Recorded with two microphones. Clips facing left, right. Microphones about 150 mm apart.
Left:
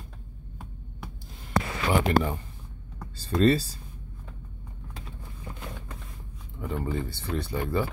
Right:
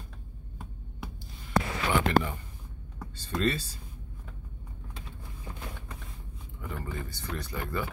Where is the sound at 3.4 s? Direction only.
35° left (ahead or behind).